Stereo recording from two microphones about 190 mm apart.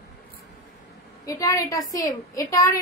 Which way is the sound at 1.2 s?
15° left (ahead or behind).